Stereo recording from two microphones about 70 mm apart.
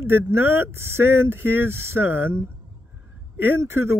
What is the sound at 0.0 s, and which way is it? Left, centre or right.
Speech, right.